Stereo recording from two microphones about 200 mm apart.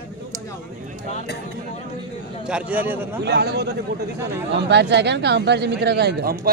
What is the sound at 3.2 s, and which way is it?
Speech, 55° right (ahead or behind).